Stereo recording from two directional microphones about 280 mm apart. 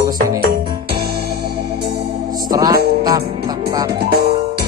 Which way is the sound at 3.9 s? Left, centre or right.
Right.